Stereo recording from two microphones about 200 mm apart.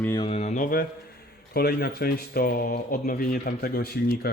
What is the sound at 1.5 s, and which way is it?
Speech, 50° left (ahead or behind).